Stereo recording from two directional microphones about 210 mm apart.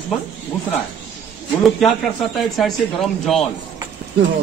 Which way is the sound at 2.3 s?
Centre (ahead or behind).